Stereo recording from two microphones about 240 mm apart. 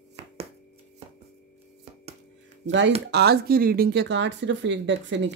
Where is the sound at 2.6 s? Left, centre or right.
Right.